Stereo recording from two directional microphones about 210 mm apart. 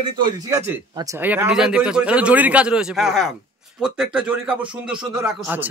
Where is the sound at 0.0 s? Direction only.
20° right (ahead or behind).